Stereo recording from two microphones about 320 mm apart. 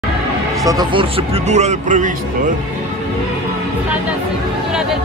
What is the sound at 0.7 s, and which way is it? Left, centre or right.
Speech, centre.